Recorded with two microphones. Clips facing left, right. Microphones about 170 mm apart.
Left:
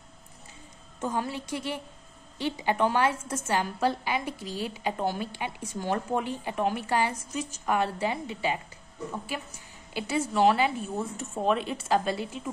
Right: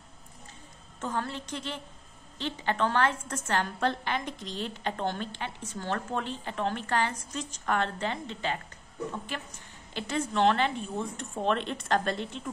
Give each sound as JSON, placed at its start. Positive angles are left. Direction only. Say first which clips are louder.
{"t": 1.0, "sound": "a woman's voice", "louder": "left 3 dB", "side_deg": 10}